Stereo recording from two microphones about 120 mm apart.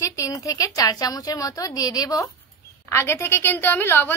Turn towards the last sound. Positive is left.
turn(degrees=15)  # may be behind; listen again after turning